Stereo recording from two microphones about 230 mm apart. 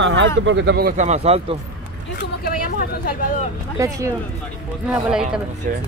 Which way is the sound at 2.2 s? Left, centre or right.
Left.